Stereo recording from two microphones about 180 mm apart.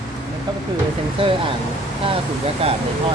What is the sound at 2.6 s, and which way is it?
Speech, 35° right (ahead or behind).